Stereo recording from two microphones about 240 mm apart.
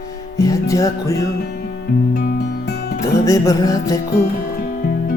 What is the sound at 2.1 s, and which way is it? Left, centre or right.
Music, left.